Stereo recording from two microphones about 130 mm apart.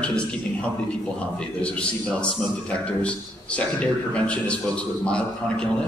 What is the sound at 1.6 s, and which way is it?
Speech, 10° left (ahead or behind).